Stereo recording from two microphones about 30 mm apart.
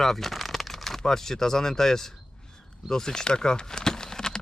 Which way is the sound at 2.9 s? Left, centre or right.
Centre.